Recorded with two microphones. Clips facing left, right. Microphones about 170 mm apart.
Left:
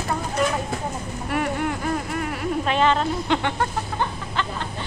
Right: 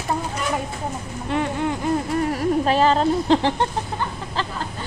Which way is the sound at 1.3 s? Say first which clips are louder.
Right 2 dB; 20° right (ahead or behind).